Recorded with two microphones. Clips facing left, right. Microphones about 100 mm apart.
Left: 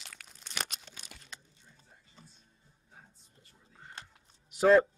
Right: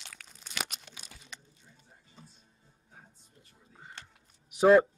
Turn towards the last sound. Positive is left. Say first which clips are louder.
# right 2 dB
turn(degrees=-15)  # may be behind; listen again after turning